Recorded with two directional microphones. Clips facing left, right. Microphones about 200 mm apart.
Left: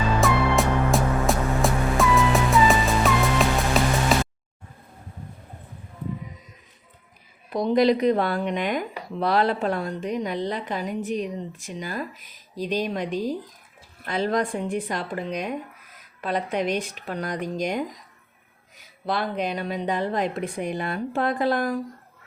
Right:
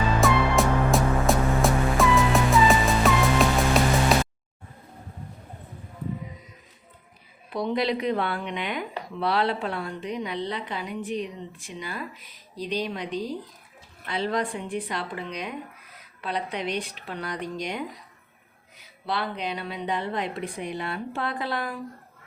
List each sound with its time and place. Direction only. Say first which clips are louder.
0.2 s music: even; centre (ahead or behind)
4.1 s music: even; centre (ahead or behind)
7.5 s a woman's voice: left 6 dB; 40° left (ahead or behind)
19.0 s a woman's voice: left 4 dB; 45° left (ahead or behind)